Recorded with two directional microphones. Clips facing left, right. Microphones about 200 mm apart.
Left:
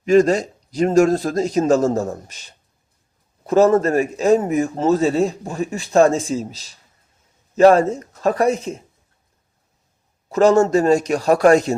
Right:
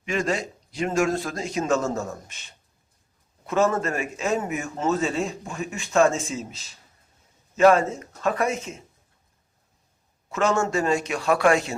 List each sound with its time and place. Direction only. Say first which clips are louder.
0.0 s a man's voice: left 12 dB; 40° left (ahead or behind)
7.5 s a man's voice: left 5 dB; 35° left (ahead or behind)
10.2 s a man's voice: left 9 dB; 35° left (ahead or behind)